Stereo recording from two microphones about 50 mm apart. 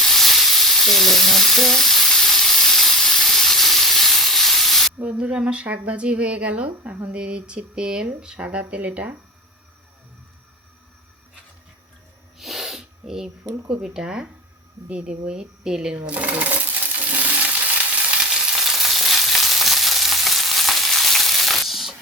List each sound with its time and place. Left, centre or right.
0.0 s sizzle: centre
5.0 s speech: right
12.4 s sneeze: centre
13.7 s speech: centre
14.8 s speech: right
16.0 s coin: right
18.3 s frying: centre